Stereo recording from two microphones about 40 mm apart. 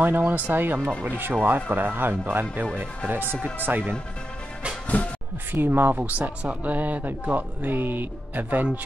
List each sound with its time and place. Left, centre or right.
0.0 s speech: right
4.9 s music: left
5.5 s speech: right
5.9 s speech: right